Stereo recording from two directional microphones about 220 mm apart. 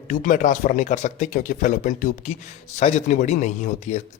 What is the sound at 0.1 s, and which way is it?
Speech, 40° left (ahead or behind).